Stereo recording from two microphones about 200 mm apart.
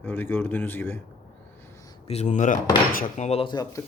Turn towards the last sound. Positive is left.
turn(degrees=20)  # may be behind; listen again after turning